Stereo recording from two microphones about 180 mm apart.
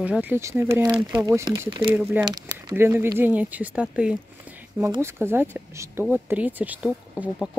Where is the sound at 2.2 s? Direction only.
20° right (ahead or behind).